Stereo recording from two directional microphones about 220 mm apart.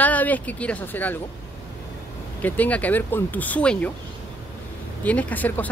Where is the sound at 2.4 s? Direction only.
5° left (ahead or behind).